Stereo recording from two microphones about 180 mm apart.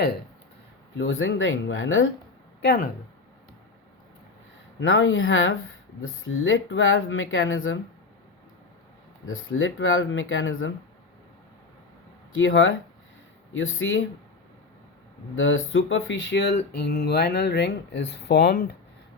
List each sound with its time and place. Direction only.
0.9 s speech: 90° left
2.6 s speech: 70° left (ahead or behind)
4.8 s speech: 90° left
9.3 s speech: 90° left
12.3 s speech: 90° left
15.4 s speech: 90° left; by 18.8 s 60° left (ahead or behind)